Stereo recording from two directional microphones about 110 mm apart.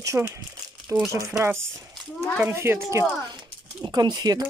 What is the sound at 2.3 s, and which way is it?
Speech, 20° right (ahead or behind).